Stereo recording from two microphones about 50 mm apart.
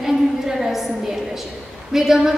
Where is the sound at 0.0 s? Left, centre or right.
Centre.